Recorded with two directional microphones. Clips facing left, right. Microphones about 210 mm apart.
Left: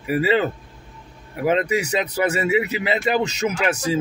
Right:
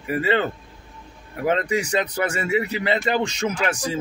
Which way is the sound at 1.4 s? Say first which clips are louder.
Left 2 dB; 5° left (ahead or behind).